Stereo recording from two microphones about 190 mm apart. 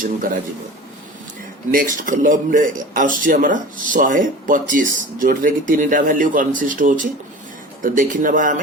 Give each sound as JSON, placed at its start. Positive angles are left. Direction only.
{"t": 1.7, "sound": "a man's voice", "side_deg": -45}